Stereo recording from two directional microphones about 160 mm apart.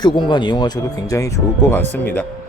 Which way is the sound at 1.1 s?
20° left (ahead or behind).